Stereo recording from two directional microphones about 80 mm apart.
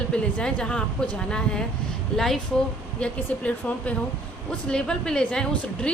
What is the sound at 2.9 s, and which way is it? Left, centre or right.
Speech, centre.